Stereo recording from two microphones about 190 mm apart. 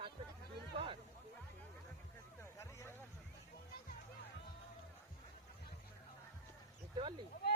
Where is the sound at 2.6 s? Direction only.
15° left (ahead or behind).